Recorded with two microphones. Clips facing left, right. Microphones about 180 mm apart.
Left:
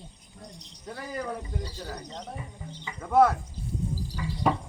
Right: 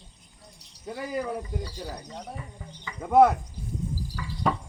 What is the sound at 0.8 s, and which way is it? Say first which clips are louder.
A man's voice: right 3 dB; 10° right (ahead or behind).